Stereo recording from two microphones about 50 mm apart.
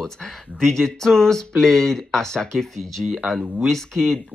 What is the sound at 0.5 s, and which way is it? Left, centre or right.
Speech, centre.